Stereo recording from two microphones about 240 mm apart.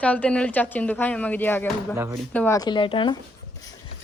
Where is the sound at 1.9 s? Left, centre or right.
Centre.